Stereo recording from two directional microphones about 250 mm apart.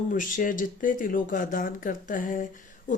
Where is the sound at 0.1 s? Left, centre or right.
Left.